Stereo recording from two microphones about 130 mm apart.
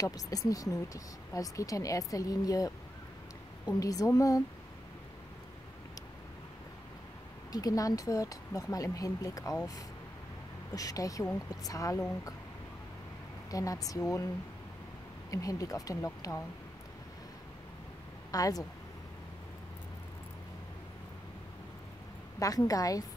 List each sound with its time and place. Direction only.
0.0 s speech: 30° left (ahead or behind)
7.5 s speech: 25° left (ahead or behind)
10.7 s speech: 30° left (ahead or behind)
13.5 s speech: 25° left (ahead or behind)
15.3 s speech: 25° left (ahead or behind)
18.3 s speech: 25° left (ahead or behind)
22.4 s speech: 25° left (ahead or behind)